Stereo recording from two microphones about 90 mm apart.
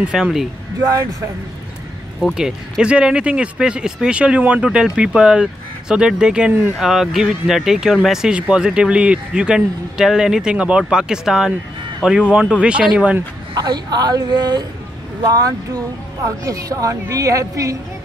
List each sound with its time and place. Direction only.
0.1 s speech: 5° right (ahead or behind)
2.3 s speech: 5° right (ahead or behind)
13.6 s a man's voice: 50° right (ahead or behind)